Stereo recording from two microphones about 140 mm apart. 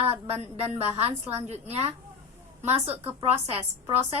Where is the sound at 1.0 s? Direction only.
45° right (ahead or behind).